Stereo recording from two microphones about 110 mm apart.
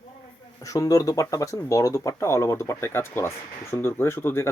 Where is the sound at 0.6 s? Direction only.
30° left (ahead or behind).